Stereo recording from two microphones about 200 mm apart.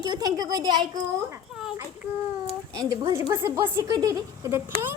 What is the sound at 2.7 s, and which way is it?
A woman's voice, 15° right (ahead or behind).